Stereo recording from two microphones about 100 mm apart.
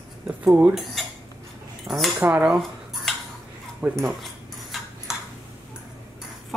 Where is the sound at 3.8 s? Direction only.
20° right (ahead or behind).